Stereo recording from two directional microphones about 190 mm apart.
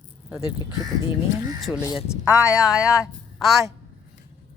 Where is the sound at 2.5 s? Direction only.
20° left (ahead or behind).